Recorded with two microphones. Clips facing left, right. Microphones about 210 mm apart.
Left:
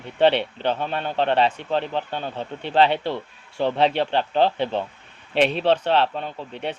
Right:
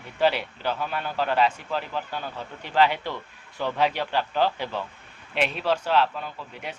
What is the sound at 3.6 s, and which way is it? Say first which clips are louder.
Speech: left 5 dB; 25° left (ahead or behind).